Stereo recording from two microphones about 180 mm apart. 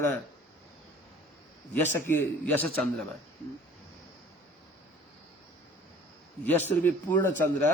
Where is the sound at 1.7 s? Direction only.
10° left (ahead or behind).